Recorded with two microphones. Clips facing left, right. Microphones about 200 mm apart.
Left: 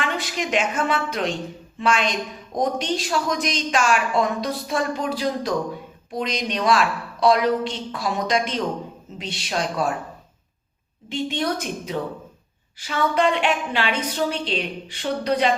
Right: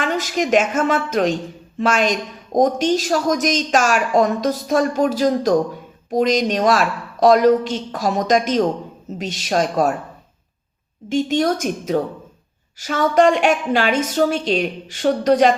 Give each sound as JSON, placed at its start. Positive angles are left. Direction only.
{"t": 0.0, "sound": "a woman's voice", "side_deg": -45}
{"t": 11.1, "sound": "a woman's voice", "side_deg": -45}